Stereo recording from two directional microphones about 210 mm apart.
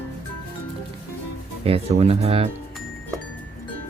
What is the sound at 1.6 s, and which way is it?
Speech, 30° right (ahead or behind).